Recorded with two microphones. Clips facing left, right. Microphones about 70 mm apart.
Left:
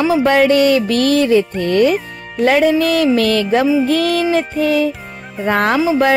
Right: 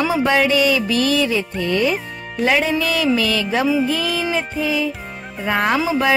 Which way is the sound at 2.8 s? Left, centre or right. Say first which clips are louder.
Left 5 dB; left.